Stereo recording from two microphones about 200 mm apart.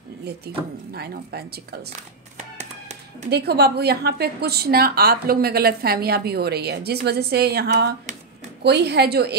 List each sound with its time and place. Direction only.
0.9 s a woman's voice: 50° right (ahead or behind)
1.9 s a sound: 35° right (ahead or behind)
3.3 s a woman's voice: 55° right (ahead or behind)